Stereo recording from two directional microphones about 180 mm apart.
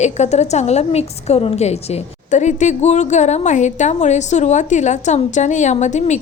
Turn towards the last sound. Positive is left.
turn(degrees=40)  # may be behind; listen again after turning